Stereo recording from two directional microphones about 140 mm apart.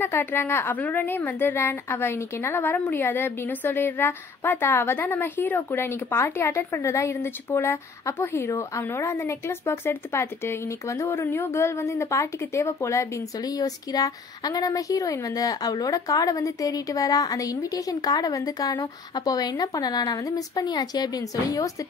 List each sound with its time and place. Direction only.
0.0 s a woman's voice: 15° left (ahead or behind)